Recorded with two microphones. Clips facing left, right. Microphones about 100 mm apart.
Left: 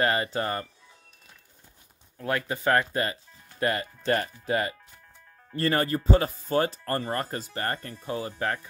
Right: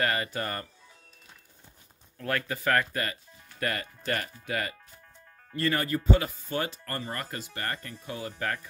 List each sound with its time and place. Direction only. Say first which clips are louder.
0.0 s speech: left 4 dB; 25° left (ahead or behind)
2.1 s speech: left 2 dB; 20° left (ahead or behind)